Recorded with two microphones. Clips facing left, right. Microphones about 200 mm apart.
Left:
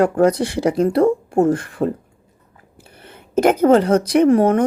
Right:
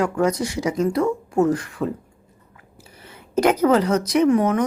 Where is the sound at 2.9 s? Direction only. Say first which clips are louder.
Left 3 dB; 55° left (ahead or behind).